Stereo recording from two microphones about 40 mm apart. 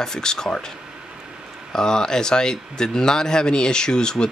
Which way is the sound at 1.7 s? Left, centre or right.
Centre.